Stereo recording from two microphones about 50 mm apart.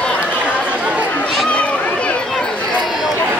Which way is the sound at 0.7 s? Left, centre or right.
Right.